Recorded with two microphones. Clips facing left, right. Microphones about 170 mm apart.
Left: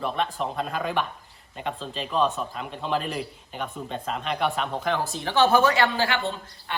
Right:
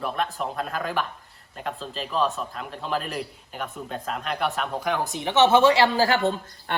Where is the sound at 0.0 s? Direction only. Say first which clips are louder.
Left 1 dB; 5° right (ahead or behind).